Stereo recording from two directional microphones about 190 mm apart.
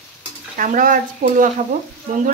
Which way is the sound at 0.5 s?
45° right (ahead or behind).